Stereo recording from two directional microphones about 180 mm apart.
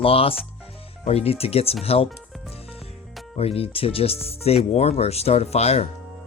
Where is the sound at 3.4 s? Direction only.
35° left (ahead or behind).